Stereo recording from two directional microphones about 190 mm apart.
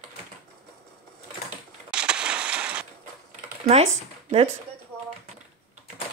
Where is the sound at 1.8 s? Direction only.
5° right (ahead or behind).